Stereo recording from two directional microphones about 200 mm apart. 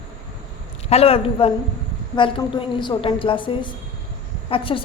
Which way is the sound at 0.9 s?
30° left (ahead or behind).